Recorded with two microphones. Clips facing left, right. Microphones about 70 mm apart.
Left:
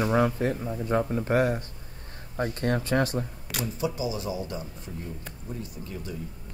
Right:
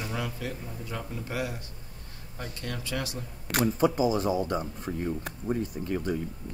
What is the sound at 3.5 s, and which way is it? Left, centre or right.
Speech, right.